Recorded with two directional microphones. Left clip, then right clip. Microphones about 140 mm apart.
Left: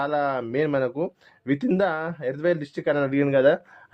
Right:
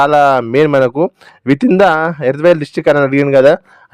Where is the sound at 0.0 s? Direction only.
65° right (ahead or behind).